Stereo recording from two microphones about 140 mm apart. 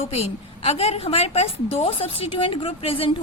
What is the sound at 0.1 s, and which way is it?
A woman's voice, 45° left (ahead or behind).